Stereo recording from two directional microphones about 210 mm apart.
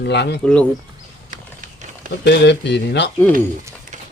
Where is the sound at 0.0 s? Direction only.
55° left (ahead or behind).